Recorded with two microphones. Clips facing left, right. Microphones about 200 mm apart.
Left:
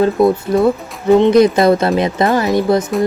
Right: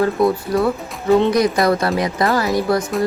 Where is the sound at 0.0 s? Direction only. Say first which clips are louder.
Left 4 dB; 25° left (ahead or behind).